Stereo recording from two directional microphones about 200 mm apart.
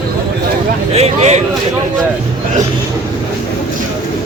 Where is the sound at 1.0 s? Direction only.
35° right (ahead or behind).